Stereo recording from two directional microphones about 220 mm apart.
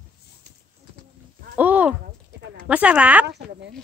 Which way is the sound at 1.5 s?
5° right (ahead or behind).